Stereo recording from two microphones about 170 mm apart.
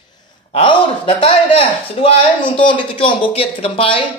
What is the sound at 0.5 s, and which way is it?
A man's voice, 35° left (ahead or behind).